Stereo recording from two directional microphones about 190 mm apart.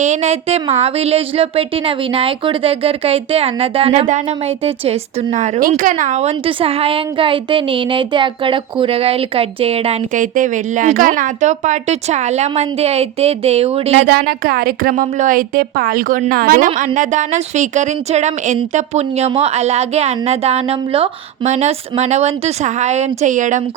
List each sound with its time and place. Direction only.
0.0 s speech: 35° right (ahead or behind)
13.9 s speech: 55° right (ahead or behind)